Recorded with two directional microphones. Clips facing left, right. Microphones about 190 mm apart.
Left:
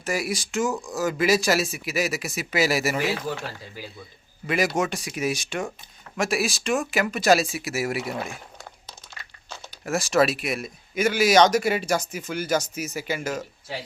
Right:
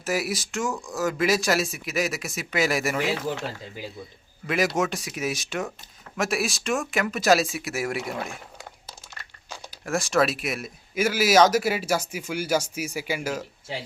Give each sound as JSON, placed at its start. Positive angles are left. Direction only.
{"t": 0.0, "sound": "speech", "side_deg": -5}
{"t": 3.2, "sound": "speech", "side_deg": -20}
{"t": 4.4, "sound": "speech", "side_deg": 0}
{"t": 8.5, "sound": "crumpling", "side_deg": -10}
{"t": 9.8, "sound": "speech", "side_deg": 0}